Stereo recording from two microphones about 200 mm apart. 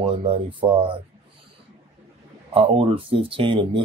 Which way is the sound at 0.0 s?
25° right (ahead or behind).